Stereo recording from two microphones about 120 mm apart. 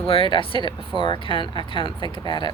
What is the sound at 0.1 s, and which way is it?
A woman's voice, 45° left (ahead or behind).